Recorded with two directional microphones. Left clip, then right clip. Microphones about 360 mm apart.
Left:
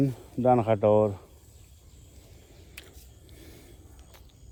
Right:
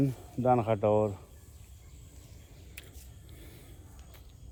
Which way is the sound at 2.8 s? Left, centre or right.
Left.